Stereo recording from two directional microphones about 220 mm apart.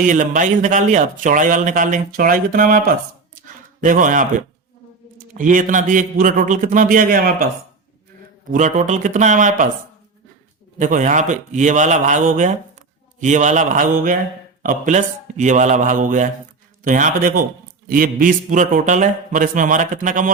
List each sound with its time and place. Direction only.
0.0 s a man's voice: 35° right (ahead or behind)
3.3 s a sound: 40° right (ahead or behind)
5.3 s a man's voice: 35° right (ahead or behind)
8.5 s a man's voice: 35° right (ahead or behind)
10.8 s a man's voice: 35° right (ahead or behind)